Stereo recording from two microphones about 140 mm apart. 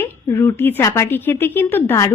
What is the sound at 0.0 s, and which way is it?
A woman's voice, 20° left (ahead or behind).